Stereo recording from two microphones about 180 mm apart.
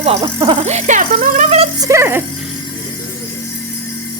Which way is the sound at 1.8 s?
15° right (ahead or behind).